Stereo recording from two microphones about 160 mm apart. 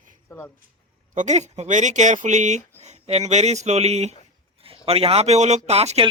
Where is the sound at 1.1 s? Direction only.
45° right (ahead or behind).